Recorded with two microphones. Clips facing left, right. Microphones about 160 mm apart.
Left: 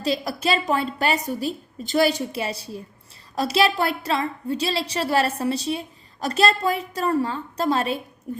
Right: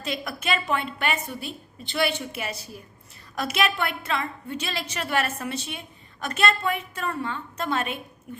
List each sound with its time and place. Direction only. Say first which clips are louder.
0.0 s a woman's voice: left 7 dB; 35° left (ahead or behind)